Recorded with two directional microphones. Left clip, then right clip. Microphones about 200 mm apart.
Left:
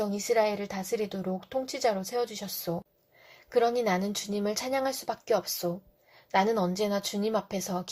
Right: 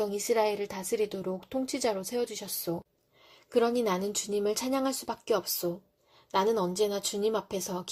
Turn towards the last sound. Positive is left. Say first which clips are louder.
# left 1 dB
turn(degrees=-35)  # may be behind; listen again after turning